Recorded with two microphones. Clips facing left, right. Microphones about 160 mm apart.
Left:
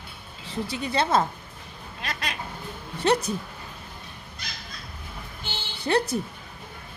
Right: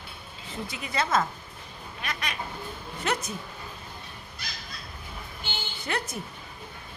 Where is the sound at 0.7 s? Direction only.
30° left (ahead or behind).